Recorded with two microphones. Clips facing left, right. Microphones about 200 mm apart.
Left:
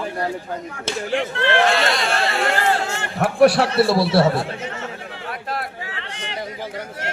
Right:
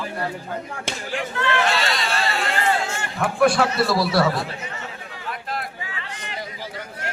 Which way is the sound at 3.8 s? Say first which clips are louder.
Left 4 dB; 30° left (ahead or behind).